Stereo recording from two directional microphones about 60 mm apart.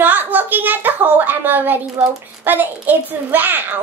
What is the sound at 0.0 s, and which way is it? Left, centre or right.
A child's voice, right.